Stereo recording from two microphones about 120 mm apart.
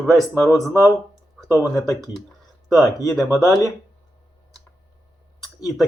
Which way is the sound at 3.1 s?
Centre (ahead or behind).